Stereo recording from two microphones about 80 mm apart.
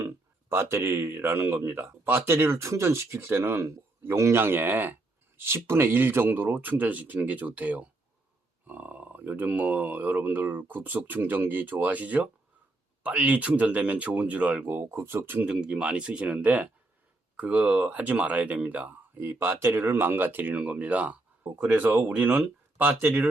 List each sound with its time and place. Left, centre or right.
0.0 s speech: right
15.4 s speech: centre
19.1 s speech: right